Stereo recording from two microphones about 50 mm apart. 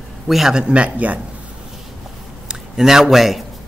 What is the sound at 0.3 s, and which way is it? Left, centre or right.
Speech, centre.